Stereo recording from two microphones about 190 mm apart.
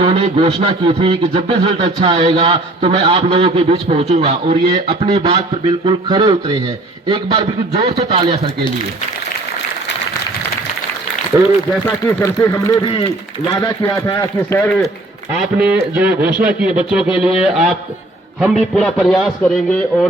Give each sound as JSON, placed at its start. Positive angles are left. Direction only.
{"t": 0.0, "sound": "a man's voice", "side_deg": -30}
{"t": 12.0, "sound": "a man's voice", "side_deg": 15}
{"t": 12.8, "sound": "a man's voice", "side_deg": 25}
{"t": 15.5, "sound": "a man's voice", "side_deg": -10}